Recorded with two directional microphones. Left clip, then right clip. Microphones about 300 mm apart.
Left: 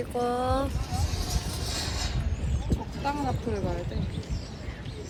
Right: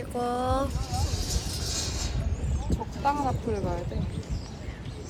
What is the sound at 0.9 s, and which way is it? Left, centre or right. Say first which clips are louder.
Music: right 1 dB; centre.